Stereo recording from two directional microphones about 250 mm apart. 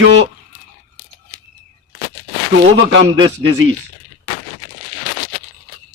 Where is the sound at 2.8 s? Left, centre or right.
Right.